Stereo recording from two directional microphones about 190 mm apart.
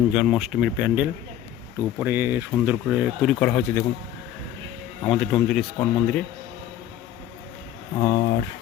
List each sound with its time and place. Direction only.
0.1 s speech: centre (ahead or behind)
5.0 s speech: 5° left (ahead or behind)
7.9 s speech: 25° left (ahead or behind)